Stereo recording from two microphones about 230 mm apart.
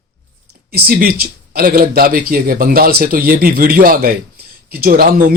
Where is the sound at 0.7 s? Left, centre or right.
Right.